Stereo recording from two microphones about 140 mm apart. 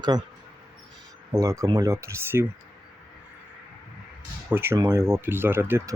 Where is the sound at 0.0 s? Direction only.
30° right (ahead or behind).